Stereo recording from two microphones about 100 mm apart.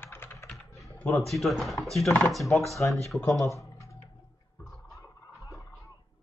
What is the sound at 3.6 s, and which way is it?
Typing, 30° left (ahead or behind).